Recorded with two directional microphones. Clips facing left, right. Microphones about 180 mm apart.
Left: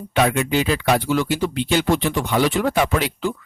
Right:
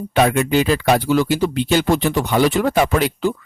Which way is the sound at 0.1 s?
45° right (ahead or behind).